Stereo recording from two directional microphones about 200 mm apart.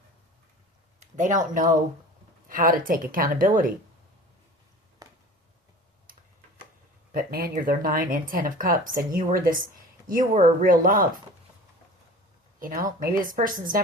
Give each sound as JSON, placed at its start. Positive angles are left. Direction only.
{"t": 0.9, "sound": "speech", "side_deg": -40}
{"t": 5.0, "sound": "a sound", "side_deg": -20}
{"t": 7.1, "sound": "speech", "side_deg": -45}
{"t": 12.5, "sound": "speech", "side_deg": -45}